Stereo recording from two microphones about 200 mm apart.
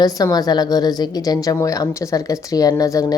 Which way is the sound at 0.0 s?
20° left (ahead or behind).